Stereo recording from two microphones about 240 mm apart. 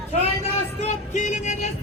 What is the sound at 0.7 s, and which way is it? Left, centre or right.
Music, left.